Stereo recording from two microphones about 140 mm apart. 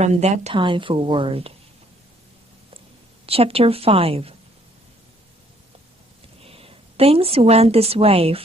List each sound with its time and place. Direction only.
0.0 s a woman's voice: 55° right (ahead or behind)
0.6 s speech: 35° right (ahead or behind)
3.3 s a woman's voice: 45° right (ahead or behind)
6.4 s a woman's voice: 45° right (ahead or behind)